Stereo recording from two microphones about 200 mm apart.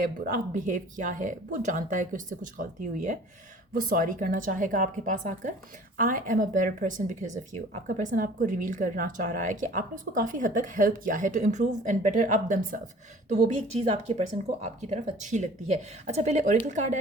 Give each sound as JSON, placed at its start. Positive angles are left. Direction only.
{"t": 0.3, "sound": "a woman's voice", "side_deg": -40}